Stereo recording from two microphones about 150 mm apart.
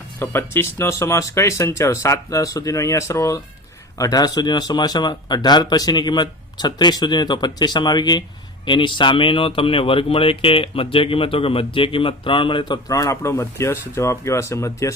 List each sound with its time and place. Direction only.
0.2 s speech: 15° left (ahead or behind)